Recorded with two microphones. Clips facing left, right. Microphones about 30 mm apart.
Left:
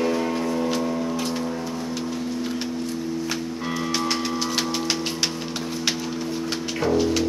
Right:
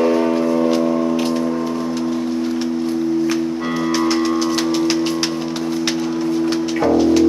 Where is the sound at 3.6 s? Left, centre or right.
Centre.